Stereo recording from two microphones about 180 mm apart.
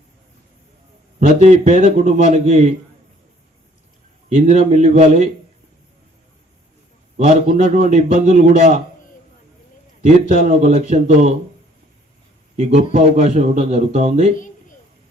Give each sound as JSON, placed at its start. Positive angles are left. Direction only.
{"t": 1.4, "sound": "a man's voice", "side_deg": -40}
{"t": 4.4, "sound": "a man's voice", "side_deg": -45}
{"t": 7.2, "sound": "a man's voice", "side_deg": -40}
{"t": 10.3, "sound": "a man's voice", "side_deg": -40}
{"t": 12.5, "sound": "a man's voice", "side_deg": -40}